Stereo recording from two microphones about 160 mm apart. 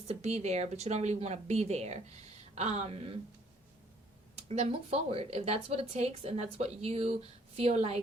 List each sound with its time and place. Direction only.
0.1 s speech: 45° right (ahead or behind)
4.4 s speech: 40° right (ahead or behind)